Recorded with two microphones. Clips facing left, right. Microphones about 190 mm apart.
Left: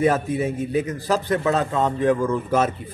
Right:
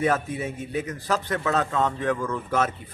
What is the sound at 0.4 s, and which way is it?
A man's voice, 30° left (ahead or behind).